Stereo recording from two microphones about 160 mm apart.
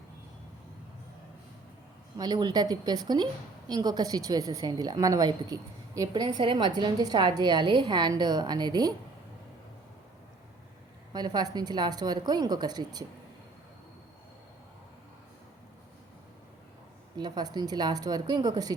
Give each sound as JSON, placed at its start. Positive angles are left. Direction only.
{"t": 2.1, "sound": "a woman's voice", "side_deg": -25}
{"t": 11.1, "sound": "a woman's voice", "side_deg": -25}
{"t": 17.2, "sound": "a woman's voice", "side_deg": -25}